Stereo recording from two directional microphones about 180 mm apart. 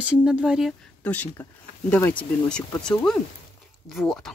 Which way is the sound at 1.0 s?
10° left (ahead or behind).